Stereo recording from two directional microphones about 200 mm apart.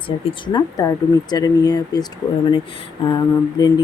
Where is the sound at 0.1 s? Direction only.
25° left (ahead or behind).